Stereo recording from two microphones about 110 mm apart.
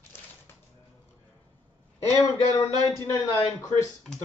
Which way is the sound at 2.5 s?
25° left (ahead or behind).